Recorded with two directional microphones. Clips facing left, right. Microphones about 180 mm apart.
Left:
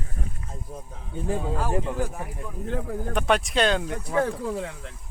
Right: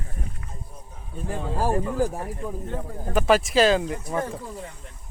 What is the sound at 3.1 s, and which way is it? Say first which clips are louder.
Speech: right 4 dB; centre (ahead or behind).